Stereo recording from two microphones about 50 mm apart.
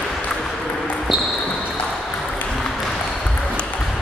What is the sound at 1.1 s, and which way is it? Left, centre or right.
Basketball bounce, centre.